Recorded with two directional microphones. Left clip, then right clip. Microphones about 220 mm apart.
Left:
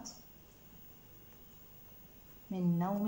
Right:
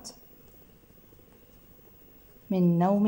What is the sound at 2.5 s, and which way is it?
Speech, 50° right (ahead or behind).